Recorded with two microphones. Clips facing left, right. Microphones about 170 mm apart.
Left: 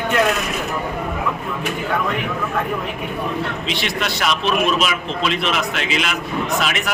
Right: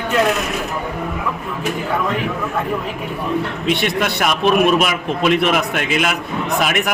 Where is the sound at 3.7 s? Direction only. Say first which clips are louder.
Right 5 dB; 55° right (ahead or behind).